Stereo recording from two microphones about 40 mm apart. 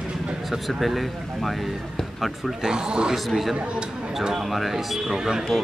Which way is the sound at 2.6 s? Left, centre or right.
Centre.